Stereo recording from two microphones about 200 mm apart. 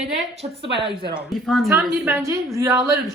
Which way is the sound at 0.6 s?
60° right (ahead or behind).